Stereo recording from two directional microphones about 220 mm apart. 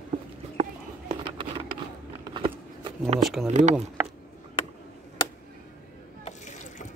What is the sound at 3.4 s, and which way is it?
Speech, 35° right (ahead or behind).